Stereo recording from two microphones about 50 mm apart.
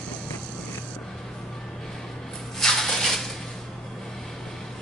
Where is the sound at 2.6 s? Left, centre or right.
Centre.